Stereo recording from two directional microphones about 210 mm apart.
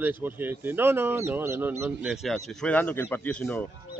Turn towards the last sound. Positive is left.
turn(degrees=5)  # may be behind; listen again after turning